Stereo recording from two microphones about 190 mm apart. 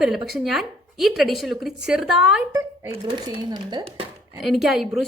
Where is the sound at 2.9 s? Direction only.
25° right (ahead or behind).